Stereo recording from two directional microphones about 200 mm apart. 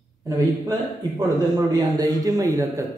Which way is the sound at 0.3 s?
20° right (ahead or behind).